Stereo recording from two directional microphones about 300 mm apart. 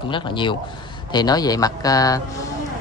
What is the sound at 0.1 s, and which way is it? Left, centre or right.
Speech, centre.